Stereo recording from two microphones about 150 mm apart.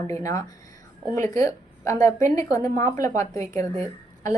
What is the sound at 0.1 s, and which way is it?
A woman's voice, 20° left (ahead or behind).